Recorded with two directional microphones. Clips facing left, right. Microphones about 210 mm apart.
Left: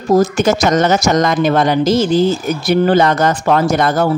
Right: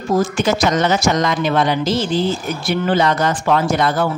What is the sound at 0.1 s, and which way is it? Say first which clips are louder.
Speech: left 5 dB; 40° left (ahead or behind).